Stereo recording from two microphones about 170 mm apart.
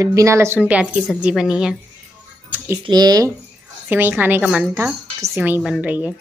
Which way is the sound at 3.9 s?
10° right (ahead or behind).